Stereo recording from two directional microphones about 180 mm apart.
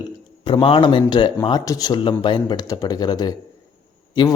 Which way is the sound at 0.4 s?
30° left (ahead or behind).